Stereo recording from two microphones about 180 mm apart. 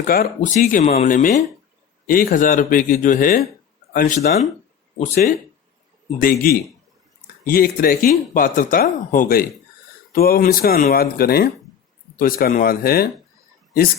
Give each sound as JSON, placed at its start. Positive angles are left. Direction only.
{"t": 0.1, "sound": "speech", "side_deg": 50}
{"t": 6.1, "sound": "speech", "side_deg": 50}